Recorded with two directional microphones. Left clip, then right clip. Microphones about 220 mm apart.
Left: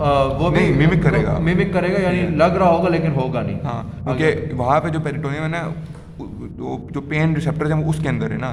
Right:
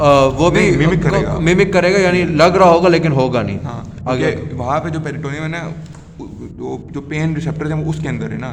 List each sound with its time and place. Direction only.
0.0 s a sound: 50° right (ahead or behind)
0.5 s a man's voice: 5° right (ahead or behind)
1.5 s a man's voice: 50° right (ahead or behind)
4.2 s a man's voice: 15° left (ahead or behind)